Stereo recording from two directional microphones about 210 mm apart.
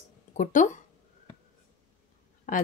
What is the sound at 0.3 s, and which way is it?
Speech, 35° left (ahead or behind).